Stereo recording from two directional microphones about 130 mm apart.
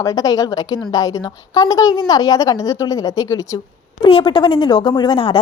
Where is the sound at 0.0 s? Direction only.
25° left (ahead or behind).